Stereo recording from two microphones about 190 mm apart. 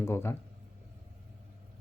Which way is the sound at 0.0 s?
10° left (ahead or behind).